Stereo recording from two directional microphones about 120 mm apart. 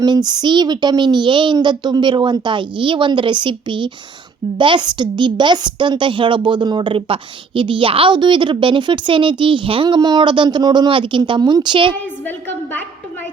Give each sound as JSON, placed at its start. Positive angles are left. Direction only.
{"t": 0.0, "sound": "a woman's voice", "side_deg": -35}